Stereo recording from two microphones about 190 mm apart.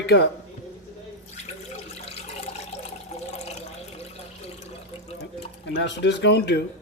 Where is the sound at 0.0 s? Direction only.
60° left (ahead or behind).